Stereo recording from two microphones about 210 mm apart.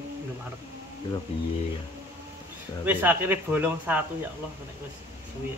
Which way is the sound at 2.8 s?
10° right (ahead or behind).